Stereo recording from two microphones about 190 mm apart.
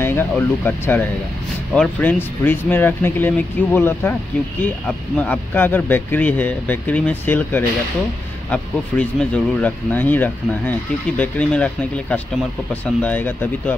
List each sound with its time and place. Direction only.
0.0 s speech: 10° left (ahead or behind)